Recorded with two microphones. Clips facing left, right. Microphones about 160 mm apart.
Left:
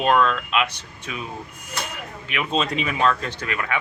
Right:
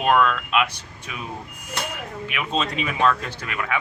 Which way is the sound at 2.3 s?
Centre (ahead or behind).